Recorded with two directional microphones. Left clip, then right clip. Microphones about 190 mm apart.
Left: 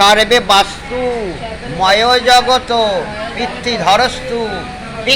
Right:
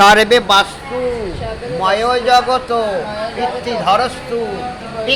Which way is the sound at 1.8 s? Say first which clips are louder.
Left 4 dB; 5° left (ahead or behind).